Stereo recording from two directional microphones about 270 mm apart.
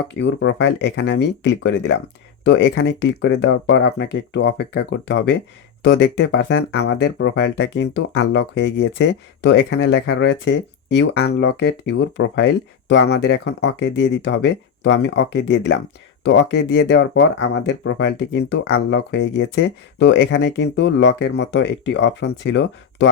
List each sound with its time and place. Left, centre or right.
0.1 s speech: left